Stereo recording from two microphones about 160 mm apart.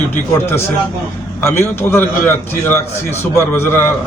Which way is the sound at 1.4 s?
15° left (ahead or behind).